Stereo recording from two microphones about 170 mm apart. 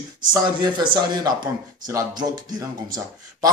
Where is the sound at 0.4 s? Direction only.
25° right (ahead or behind).